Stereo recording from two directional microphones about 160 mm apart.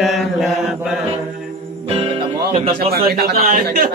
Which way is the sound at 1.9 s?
40° right (ahead or behind).